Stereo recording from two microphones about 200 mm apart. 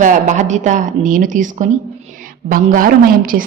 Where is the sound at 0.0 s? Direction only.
40° right (ahead or behind).